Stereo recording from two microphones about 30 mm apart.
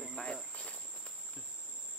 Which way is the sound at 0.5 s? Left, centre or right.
Left.